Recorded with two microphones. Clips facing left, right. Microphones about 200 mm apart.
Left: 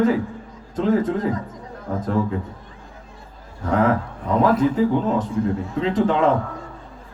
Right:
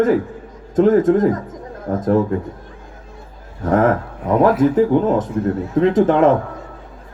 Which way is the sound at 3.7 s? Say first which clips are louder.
Right 3 dB; 50° right (ahead or behind).